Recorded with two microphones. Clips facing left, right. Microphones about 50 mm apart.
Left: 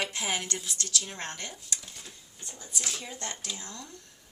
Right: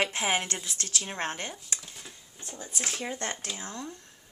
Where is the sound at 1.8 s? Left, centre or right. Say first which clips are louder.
Right 1 dB; centre.